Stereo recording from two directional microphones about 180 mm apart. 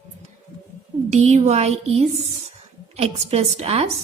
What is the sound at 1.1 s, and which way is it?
Speech, 35° right (ahead or behind).